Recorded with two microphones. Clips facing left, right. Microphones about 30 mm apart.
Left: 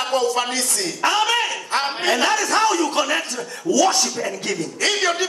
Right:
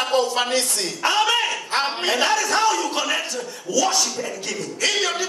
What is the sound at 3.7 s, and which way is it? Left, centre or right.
Speech, centre.